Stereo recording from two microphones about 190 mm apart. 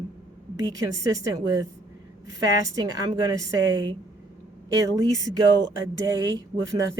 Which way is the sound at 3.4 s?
20° right (ahead or behind).